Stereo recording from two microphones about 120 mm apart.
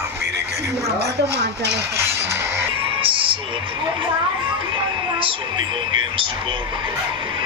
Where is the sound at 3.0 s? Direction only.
45° right (ahead or behind).